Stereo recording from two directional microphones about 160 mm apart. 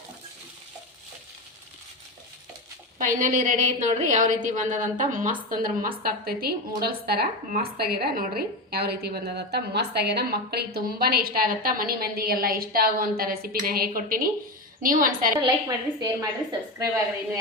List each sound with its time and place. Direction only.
3.0 s a woman's voice: 55° right (ahead or behind)
8.7 s a woman's voice: 80° right; by 15.3 s 60° right (ahead or behind)
15.4 s a woman's voice: 25° right (ahead or behind)